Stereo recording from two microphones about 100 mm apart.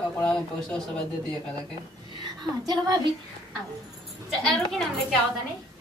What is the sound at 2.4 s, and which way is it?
Speech, 45° right (ahead or behind).